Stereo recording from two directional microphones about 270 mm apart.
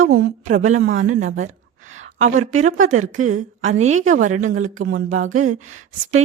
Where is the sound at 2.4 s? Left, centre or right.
Right.